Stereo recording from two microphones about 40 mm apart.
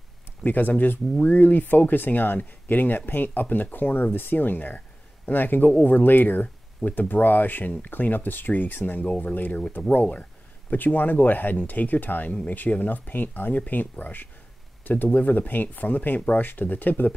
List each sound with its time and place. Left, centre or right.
0.4 s speech: left
10.7 s speech: left